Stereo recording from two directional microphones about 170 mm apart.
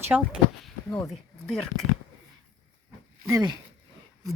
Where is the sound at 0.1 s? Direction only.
10° right (ahead or behind).